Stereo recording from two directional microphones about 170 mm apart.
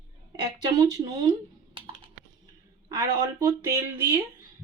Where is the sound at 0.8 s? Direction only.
20° right (ahead or behind).